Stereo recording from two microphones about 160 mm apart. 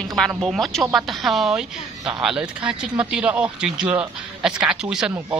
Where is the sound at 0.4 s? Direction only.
Centre (ahead or behind).